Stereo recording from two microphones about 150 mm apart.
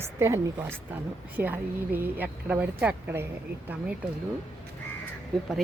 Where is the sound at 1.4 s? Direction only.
10° right (ahead or behind).